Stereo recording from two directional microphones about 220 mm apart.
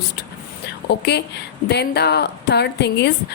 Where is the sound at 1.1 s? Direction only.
50° left (ahead or behind).